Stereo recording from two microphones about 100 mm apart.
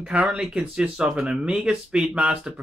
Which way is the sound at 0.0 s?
10° right (ahead or behind).